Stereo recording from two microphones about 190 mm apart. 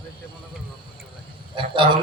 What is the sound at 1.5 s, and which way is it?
Speech, 25° right (ahead or behind).